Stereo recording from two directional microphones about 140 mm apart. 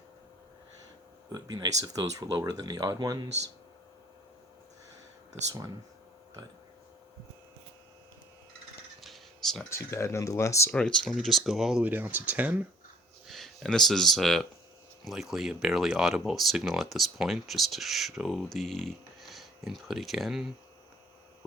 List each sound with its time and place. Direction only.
1.3 s speech: 30° right (ahead or behind)
9.0 s a sound: centre (ahead or behind)
9.6 s speech: 20° left (ahead or behind)
10.8 s speech: 5° left (ahead or behind); by 12.6 s 10° right (ahead or behind)
13.2 s speech: centre (ahead or behind)